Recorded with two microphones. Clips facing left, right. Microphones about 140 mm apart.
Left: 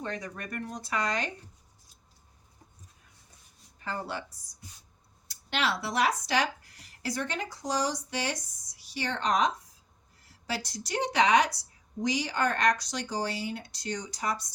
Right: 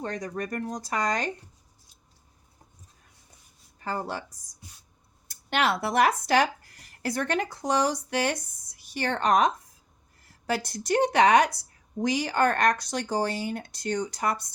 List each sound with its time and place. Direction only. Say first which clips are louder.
0.0 s speech: right 5 dB; 40° right (ahead or behind)
3.8 s speech: right 4 dB; 40° right (ahead or behind); by 14.4 s 60° right (ahead or behind)